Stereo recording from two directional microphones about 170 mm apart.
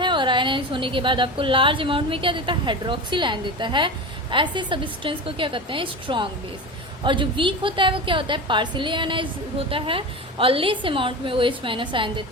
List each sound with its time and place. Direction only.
0.0 s a woman's voice: 30° right (ahead or behind)